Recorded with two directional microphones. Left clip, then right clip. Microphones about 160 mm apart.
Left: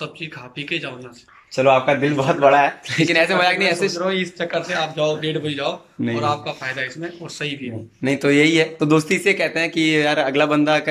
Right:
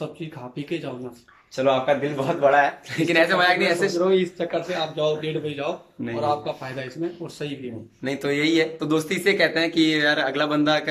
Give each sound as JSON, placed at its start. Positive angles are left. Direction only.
{"t": 0.0, "sound": "speech", "side_deg": -40}
{"t": 1.5, "sound": "a man's voice", "side_deg": 5}
{"t": 3.3, "sound": "speech", "side_deg": 15}
{"t": 4.0, "sound": "speech", "side_deg": -25}
{"t": 6.1, "sound": "speech", "side_deg": -30}
{"t": 8.0, "sound": "speech", "side_deg": 5}